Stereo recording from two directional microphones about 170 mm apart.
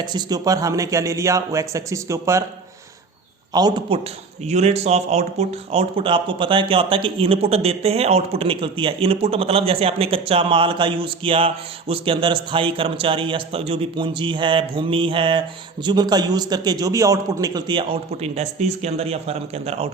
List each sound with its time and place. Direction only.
0.0 s a man's voice: 25° right (ahead or behind)
3.5 s a man's voice: 25° right (ahead or behind)